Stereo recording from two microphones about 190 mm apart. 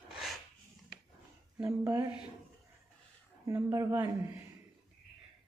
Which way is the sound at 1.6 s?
20° right (ahead or behind).